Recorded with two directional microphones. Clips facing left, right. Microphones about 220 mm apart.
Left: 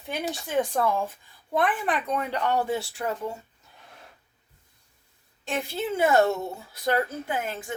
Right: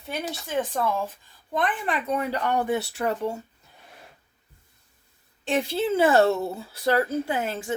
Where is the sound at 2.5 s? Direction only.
20° right (ahead or behind).